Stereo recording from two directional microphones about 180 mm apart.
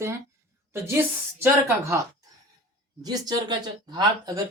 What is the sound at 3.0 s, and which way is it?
Speech, 20° right (ahead or behind).